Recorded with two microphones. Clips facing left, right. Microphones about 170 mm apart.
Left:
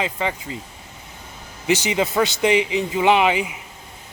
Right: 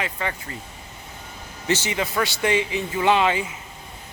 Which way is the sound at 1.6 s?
15° left (ahead or behind).